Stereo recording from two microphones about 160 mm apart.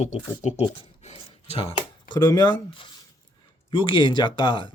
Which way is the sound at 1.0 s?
40° left (ahead or behind).